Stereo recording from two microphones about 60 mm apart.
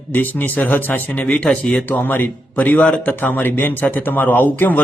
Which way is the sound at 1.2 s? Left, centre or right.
Centre.